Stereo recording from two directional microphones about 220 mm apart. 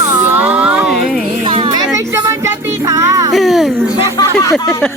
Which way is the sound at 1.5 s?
25° right (ahead or behind).